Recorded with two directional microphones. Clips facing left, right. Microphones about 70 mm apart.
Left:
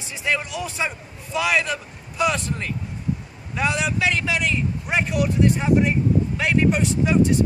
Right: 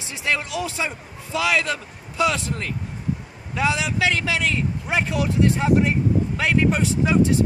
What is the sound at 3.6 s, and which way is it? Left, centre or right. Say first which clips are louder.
Speech: right 1 dB; right.